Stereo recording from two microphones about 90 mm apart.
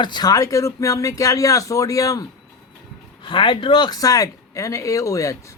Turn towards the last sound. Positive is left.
turn(degrees=35)  # may be behind; listen again after turning